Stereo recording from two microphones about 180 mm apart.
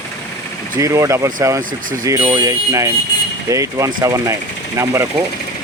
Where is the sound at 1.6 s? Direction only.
50° right (ahead or behind).